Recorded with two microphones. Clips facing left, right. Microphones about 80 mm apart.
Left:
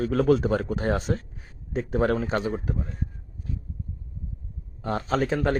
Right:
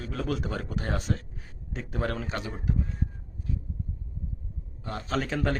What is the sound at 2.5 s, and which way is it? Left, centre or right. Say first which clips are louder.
Speech: left 3 dB; left.